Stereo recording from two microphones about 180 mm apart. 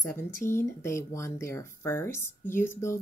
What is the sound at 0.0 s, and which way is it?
Speech, 15° left (ahead or behind).